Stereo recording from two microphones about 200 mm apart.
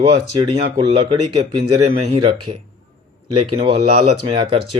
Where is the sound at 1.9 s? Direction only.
30° right (ahead or behind).